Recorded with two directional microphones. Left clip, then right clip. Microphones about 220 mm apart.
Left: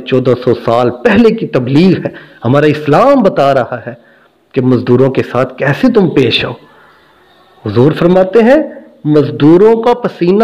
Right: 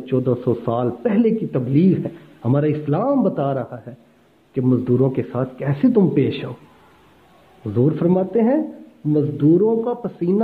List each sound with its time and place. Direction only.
0.0 s a man's voice: 25° left (ahead or behind)
7.6 s a man's voice: 25° left (ahead or behind)